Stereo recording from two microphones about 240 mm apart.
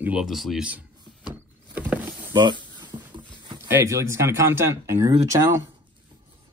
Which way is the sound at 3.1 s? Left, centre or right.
Centre.